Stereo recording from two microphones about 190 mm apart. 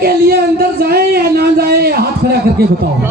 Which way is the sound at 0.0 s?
55° right (ahead or behind).